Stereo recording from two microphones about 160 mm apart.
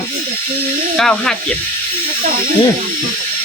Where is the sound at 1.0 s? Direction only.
5° left (ahead or behind).